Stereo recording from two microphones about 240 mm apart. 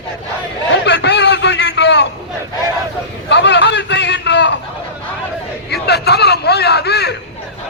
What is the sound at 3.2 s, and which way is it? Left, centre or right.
Vehicle, left.